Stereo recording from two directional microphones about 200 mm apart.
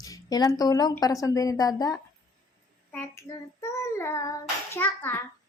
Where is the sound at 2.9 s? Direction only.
10° left (ahead or behind).